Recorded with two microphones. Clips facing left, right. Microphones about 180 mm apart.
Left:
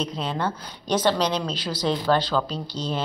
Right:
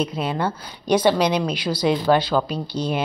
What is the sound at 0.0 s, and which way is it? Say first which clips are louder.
Speech: right 4 dB; 10° right (ahead or behind).